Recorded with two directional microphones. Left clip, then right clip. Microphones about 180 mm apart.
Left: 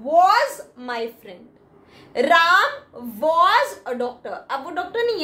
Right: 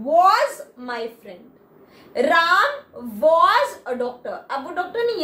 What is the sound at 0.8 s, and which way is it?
A woman's voice, 30° left (ahead or behind).